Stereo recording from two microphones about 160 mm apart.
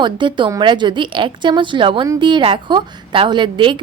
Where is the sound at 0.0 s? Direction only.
30° right (ahead or behind).